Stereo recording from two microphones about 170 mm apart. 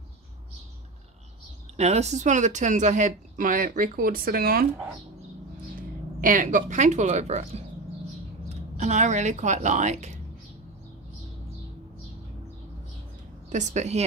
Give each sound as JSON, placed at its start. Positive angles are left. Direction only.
{"t": 1.8, "sound": "speech", "side_deg": -40}
{"t": 6.2, "sound": "speech", "side_deg": -50}
{"t": 13.5, "sound": "speech", "side_deg": -45}